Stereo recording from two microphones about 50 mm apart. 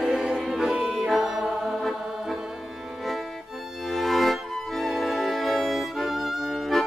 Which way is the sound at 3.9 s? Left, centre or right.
Centre.